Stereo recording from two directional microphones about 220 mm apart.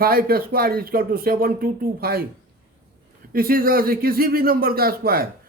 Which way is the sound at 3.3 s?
40° right (ahead or behind).